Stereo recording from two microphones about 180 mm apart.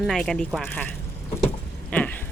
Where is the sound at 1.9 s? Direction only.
10° left (ahead or behind).